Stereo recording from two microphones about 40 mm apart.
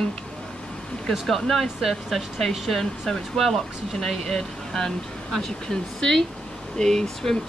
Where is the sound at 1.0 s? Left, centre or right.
Centre.